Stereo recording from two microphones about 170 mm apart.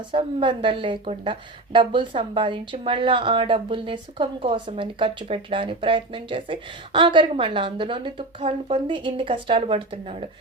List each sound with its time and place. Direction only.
0.1 s a woman's voice: 30° right (ahead or behind)